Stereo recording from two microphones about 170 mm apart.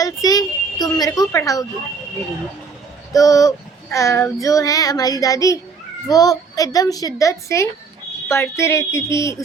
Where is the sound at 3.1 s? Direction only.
20° left (ahead or behind).